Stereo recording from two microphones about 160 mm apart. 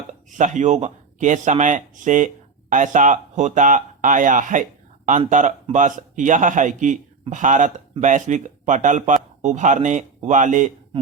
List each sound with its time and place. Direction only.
0.1 s a man's voice: 50° right (ahead or behind)